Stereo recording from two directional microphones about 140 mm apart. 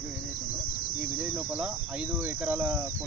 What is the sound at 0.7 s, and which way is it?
Cricket, 90° left.